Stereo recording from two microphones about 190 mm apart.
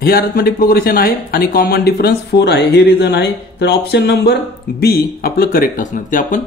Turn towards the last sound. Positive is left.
turn(degrees=45)  # may be behind; listen again after turning